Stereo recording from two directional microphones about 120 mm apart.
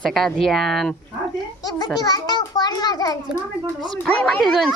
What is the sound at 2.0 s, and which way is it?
A child's voice, 30° left (ahead or behind).